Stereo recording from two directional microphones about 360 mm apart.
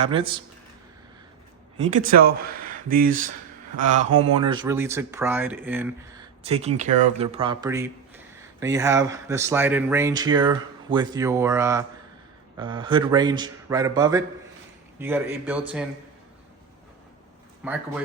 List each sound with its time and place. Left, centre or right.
0.0 s speech: centre
1.8 s speech: right
3.8 s speech: centre
6.4 s speech: centre
17.6 s speech: centre